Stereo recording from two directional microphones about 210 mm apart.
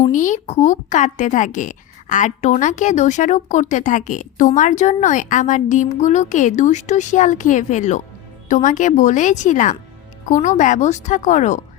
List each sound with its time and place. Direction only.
0.0 s a woman's voice: 40° left (ahead or behind)